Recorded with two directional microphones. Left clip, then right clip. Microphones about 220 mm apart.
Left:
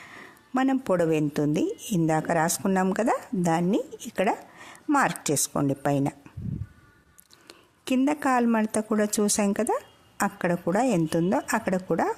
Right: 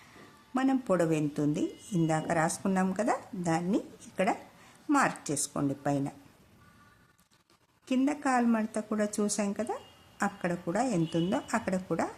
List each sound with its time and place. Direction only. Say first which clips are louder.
0.5 s speech: left 4 dB; 40° left (ahead or behind)
7.4 s speech: left 7 dB; 40° left (ahead or behind)